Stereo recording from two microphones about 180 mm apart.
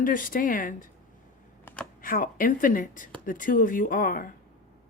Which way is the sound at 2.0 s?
50° left (ahead or behind).